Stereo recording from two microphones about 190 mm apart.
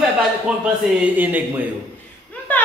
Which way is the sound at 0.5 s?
5° right (ahead or behind).